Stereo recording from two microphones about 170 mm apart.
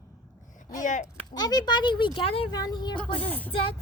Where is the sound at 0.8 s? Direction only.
50° left (ahead or behind).